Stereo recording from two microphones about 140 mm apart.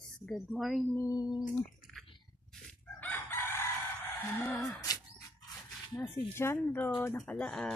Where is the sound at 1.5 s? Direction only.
5° left (ahead or behind).